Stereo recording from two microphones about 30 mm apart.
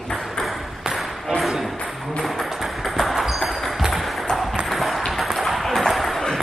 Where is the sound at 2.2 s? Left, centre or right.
Centre.